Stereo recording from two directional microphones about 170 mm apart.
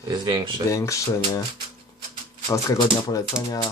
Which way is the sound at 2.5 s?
20° left (ahead or behind).